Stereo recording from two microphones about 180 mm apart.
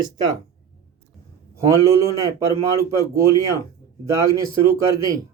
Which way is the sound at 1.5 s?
15° right (ahead or behind).